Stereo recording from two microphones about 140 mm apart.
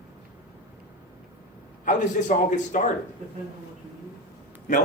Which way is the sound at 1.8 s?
65° left (ahead or behind).